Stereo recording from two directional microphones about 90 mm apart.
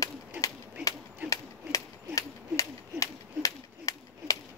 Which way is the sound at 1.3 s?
35° left (ahead or behind).